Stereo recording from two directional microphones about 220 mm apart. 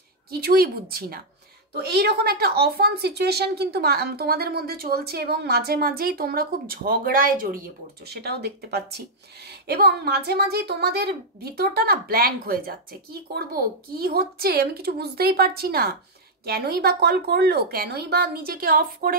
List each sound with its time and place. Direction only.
0.3 s speech: 45° right (ahead or behind)